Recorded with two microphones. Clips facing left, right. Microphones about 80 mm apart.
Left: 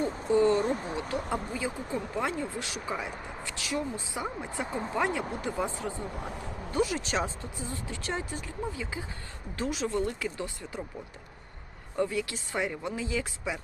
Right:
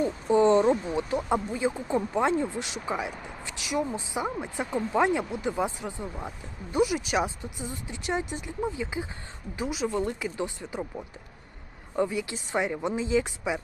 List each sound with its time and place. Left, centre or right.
0.0 s speech: right
4.6 s speech: left
4.9 s speech: right
9.6 s speech: centre
11.9 s speech: centre